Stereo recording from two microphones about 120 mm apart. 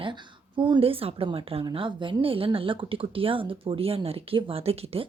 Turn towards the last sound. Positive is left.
turn(degrees=-55)  # may be behind; listen again after turning